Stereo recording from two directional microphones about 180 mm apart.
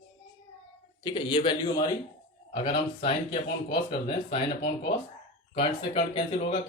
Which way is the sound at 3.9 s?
35° left (ahead or behind).